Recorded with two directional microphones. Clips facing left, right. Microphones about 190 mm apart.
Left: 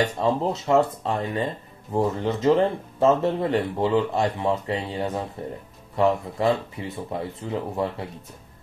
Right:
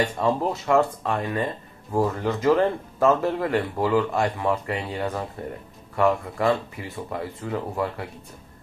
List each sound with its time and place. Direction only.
0.2 s speech: 25° left (ahead or behind)